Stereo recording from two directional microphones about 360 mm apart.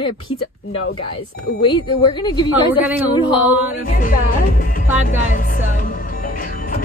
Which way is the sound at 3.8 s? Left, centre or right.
Left.